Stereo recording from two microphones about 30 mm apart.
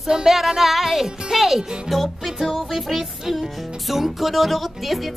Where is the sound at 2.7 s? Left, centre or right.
Centre.